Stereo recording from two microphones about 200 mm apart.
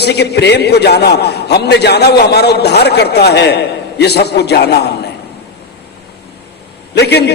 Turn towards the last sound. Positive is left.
turn(degrees=60)  # may be behind; listen again after turning